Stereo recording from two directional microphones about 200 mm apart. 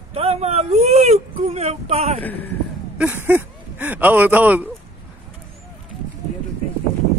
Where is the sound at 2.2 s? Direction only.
10° left (ahead or behind).